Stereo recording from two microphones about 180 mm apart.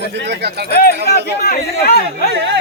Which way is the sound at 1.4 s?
60° left (ahead or behind).